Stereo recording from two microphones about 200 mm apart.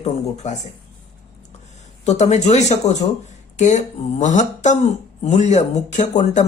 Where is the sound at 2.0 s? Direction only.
35° left (ahead or behind).